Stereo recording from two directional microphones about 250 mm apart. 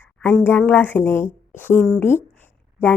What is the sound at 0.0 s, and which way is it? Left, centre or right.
Speech, centre.